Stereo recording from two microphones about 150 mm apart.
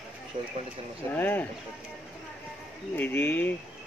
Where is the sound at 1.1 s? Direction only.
15° left (ahead or behind).